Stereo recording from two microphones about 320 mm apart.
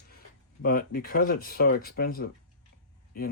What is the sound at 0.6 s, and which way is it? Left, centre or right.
Speech, left.